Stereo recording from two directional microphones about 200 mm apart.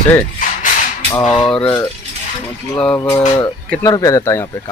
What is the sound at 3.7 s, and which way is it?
Speech, 10° left (ahead or behind).